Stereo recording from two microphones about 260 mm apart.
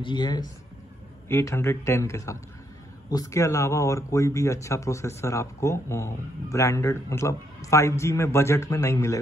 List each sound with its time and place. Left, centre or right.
0.0 s speech: centre